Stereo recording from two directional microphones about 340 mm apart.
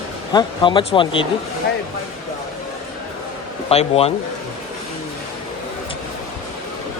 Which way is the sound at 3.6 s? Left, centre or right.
Centre.